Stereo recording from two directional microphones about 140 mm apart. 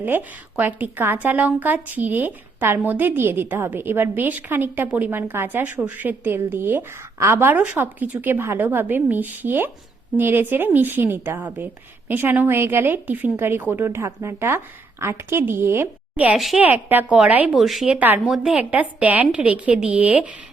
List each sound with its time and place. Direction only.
0.0 s speech: 15° right (ahead or behind)